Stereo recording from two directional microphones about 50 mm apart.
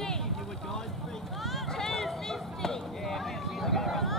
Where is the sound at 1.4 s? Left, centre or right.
Centre.